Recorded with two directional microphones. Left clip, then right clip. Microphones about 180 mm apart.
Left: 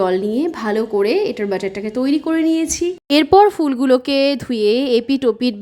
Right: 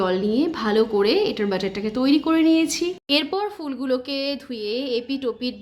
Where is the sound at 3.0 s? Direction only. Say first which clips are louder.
Left 13 dB; 45° left (ahead or behind).